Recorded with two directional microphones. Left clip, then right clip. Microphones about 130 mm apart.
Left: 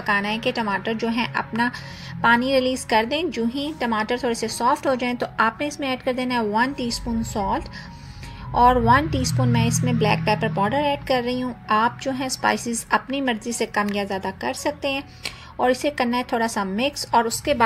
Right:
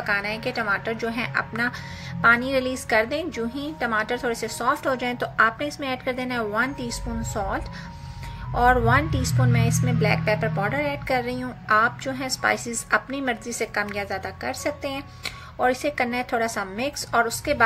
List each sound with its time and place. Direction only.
0.0 s a woman's voice: 20° left (ahead or behind)
8.5 s a woman's voice: 5° left (ahead or behind)